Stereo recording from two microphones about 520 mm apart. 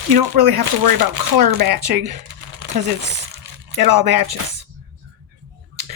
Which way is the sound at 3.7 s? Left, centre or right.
Right.